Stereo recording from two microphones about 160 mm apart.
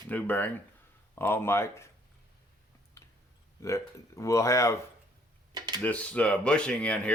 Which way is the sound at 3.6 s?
20° left (ahead or behind).